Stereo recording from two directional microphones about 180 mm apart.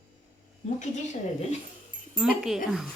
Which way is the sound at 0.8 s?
40° left (ahead or behind).